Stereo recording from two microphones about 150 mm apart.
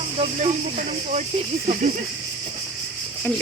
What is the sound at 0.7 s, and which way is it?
Speech, 55° right (ahead or behind).